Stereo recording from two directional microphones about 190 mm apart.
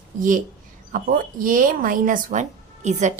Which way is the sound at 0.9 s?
45° right (ahead or behind).